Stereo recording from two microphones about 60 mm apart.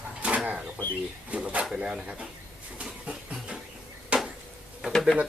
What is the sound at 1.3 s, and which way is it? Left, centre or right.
Speech, right.